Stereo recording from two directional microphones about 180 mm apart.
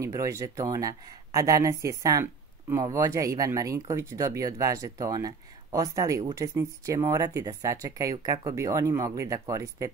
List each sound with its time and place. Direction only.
0.0 s speech: 15° right (ahead or behind)